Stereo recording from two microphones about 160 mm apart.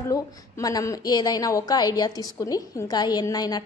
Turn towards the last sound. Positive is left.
turn(degrees=25)  # may be behind; listen again after turning